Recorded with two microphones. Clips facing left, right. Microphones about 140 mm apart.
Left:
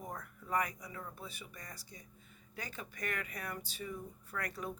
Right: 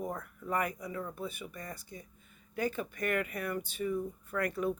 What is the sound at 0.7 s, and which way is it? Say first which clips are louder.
Speech: right 8 dB; 55° right (ahead or behind).